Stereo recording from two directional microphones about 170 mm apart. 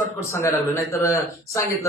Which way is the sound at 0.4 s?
15° left (ahead or behind).